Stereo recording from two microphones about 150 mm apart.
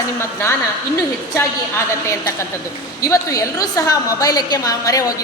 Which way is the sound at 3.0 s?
20° left (ahead or behind).